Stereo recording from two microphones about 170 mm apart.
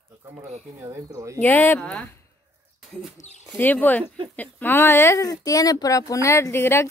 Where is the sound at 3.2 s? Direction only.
40° left (ahead or behind).